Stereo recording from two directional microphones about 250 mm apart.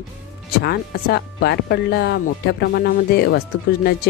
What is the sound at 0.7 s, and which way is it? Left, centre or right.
Speech, left.